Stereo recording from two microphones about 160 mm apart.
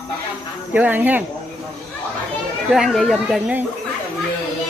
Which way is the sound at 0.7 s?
10° right (ahead or behind).